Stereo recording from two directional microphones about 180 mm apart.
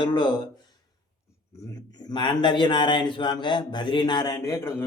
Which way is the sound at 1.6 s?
20° left (ahead or behind).